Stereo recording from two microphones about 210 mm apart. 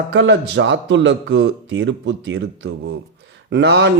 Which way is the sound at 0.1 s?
60° right (ahead or behind).